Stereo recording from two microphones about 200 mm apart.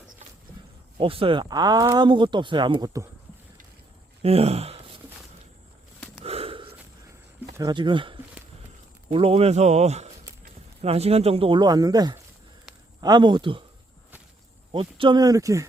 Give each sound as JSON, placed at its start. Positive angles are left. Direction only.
{"t": 0.9, "sound": "speech", "side_deg": -25}
{"t": 4.2, "sound": "speech", "side_deg": -30}
{"t": 6.2, "sound": "gasp", "side_deg": -30}
{"t": 7.4, "sound": "speech", "side_deg": -20}
{"t": 14.7, "sound": "speech", "side_deg": -25}